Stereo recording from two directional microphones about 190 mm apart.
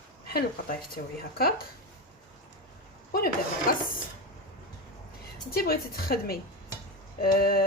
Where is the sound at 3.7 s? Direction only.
50° left (ahead or behind).